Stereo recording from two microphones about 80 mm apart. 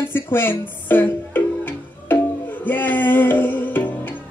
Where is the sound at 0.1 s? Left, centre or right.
Left.